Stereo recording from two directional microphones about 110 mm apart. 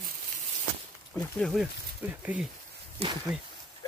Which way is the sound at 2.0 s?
15° right (ahead or behind).